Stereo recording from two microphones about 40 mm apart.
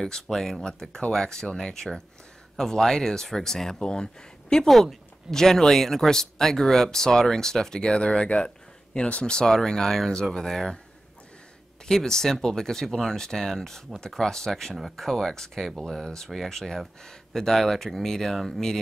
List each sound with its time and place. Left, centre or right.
0.0 s speech: centre
3.8 s speech: centre
4.6 s speech: centre
11.9 s speech: centre